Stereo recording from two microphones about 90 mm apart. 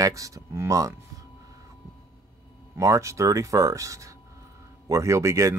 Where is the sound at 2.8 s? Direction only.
35° right (ahead or behind).